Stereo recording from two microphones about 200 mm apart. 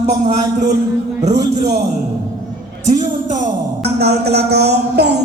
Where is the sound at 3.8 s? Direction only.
55° right (ahead or behind).